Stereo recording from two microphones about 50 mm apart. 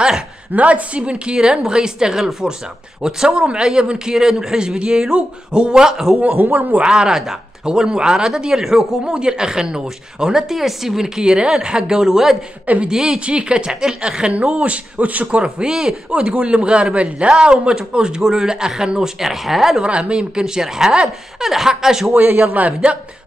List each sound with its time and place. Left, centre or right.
0.5 s a man's voice: right; by 6.1 s centre
6.3 s a man's voice: right
6.8 s a man's voice: centre
15.4 s a man's voice: centre
16.1 s a man's voice: right; by 19.8 s centre
19.8 s a man's voice: centre
22.1 s a man's voice: right